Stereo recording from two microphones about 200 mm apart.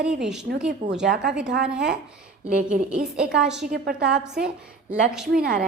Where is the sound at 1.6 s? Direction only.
5° right (ahead or behind).